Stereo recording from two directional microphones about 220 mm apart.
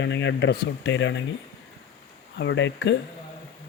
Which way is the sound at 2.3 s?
55° left (ahead or behind).